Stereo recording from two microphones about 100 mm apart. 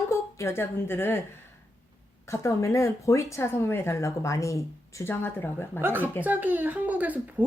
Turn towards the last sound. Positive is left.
turn(degrees=-15)  # may be behind; listen again after turning